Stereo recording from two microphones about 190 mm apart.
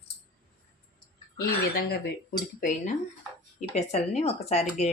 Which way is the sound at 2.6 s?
40° left (ahead or behind).